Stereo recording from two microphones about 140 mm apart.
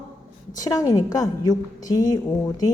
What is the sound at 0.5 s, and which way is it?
A woman's voice, 25° left (ahead or behind).